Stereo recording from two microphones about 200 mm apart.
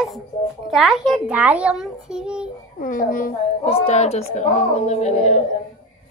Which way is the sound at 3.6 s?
30° left (ahead or behind).